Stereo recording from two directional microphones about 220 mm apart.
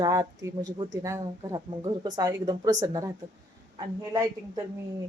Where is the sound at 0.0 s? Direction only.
15° right (ahead or behind).